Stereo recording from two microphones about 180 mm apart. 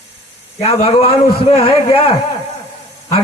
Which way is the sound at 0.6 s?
30° left (ahead or behind).